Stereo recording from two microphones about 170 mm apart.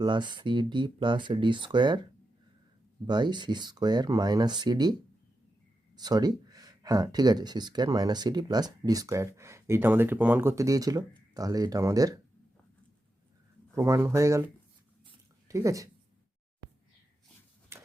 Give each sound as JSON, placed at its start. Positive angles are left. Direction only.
{"t": 0.0, "sound": "speech", "side_deg": -25}
{"t": 3.1, "sound": "speech", "side_deg": -25}
{"t": 6.0, "sound": "speech", "side_deg": -25}
{"t": 13.7, "sound": "speech", "side_deg": -15}
{"t": 15.4, "sound": "a woman's voice", "side_deg": -20}